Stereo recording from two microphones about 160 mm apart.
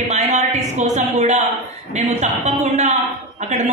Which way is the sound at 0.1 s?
45° right (ahead or behind).